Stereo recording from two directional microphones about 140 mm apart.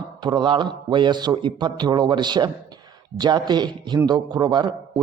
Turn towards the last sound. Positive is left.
turn(degrees=-30)  # may be behind; listen again after turning